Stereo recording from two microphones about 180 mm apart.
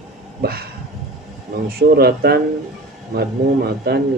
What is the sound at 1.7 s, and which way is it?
Speech, 60° right (ahead or behind).